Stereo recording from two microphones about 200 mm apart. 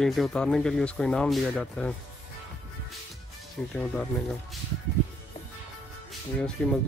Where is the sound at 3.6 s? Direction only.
5° left (ahead or behind).